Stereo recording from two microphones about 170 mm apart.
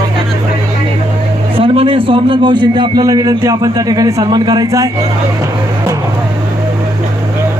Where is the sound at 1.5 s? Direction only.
30° right (ahead or behind).